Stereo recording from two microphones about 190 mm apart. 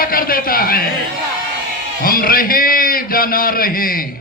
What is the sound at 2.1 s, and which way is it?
A man's voice, 50° left (ahead or behind).